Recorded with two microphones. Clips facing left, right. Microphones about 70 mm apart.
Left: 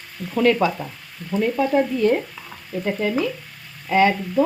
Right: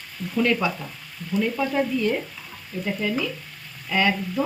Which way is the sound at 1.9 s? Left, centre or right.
Left.